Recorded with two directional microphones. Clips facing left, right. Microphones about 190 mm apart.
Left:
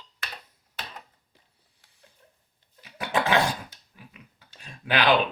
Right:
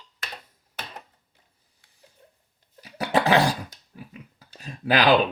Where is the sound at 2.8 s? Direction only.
35° right (ahead or behind).